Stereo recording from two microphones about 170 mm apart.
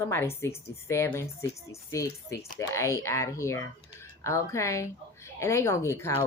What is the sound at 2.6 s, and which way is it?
Speech, 20° left (ahead or behind).